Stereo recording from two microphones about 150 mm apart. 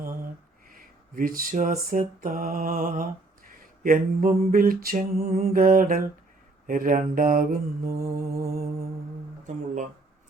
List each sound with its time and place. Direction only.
0.7 s a sound: 70° right (ahead or behind)
7.9 s mantra: 20° right (ahead or behind)
9.5 s speech: 55° right (ahead or behind)